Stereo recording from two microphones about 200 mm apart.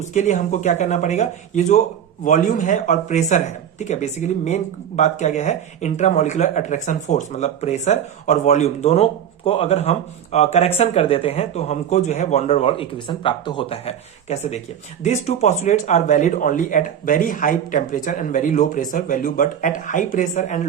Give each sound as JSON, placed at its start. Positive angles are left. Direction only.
{"t": 0.1, "sound": "speech", "side_deg": 35}